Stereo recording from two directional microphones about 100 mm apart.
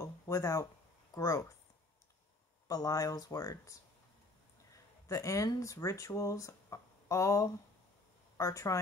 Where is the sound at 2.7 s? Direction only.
35° left (ahead or behind).